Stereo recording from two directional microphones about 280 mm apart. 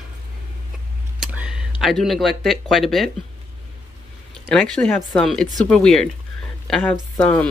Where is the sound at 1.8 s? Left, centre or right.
Centre.